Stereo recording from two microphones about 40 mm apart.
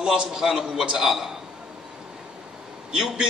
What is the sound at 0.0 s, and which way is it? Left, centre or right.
A man's voice, centre.